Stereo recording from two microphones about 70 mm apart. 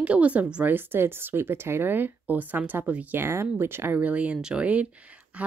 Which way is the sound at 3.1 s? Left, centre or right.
Right.